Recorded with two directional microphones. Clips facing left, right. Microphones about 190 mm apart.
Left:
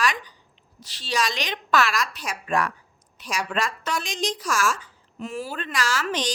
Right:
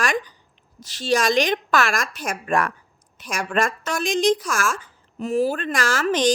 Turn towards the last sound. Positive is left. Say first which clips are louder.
# right 6 dB
turn(degrees=-50)  # may be behind; listen again after turning